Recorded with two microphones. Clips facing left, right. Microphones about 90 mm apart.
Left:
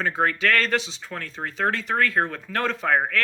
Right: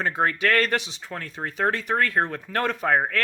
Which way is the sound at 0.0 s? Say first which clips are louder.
Even; 20° right (ahead or behind).